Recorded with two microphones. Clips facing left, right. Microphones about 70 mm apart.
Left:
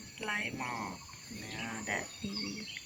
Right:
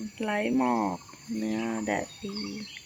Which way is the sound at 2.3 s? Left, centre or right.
Right.